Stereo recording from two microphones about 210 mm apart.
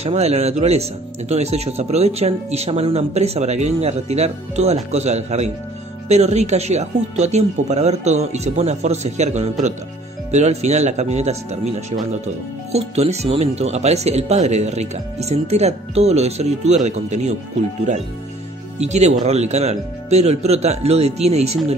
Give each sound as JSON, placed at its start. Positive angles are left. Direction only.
{"t": 0.0, "sound": "speech", "side_deg": -30}
{"t": 18.8, "sound": "speech", "side_deg": -30}